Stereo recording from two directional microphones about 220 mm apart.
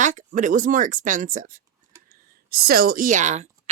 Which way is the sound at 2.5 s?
45° right (ahead or behind).